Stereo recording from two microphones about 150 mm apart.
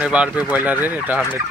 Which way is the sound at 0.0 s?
10° right (ahead or behind).